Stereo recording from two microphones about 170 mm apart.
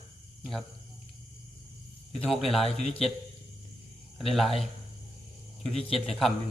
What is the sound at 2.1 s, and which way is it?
Speech, centre (ahead or behind).